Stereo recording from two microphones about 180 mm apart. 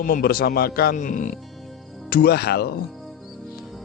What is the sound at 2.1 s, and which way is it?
Speech, 55° left (ahead or behind).